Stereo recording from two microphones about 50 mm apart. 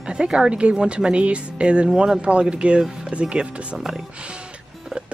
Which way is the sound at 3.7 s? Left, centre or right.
Centre.